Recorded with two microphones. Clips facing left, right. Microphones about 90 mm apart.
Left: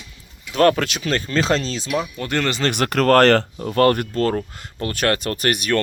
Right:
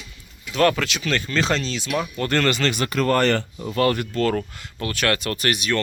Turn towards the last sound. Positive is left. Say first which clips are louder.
# left 3 dB
turn(degrees=50)  # may be behind; listen again after turning